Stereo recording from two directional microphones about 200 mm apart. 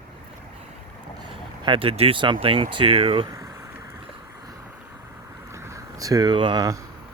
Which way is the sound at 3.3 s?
15° right (ahead or behind).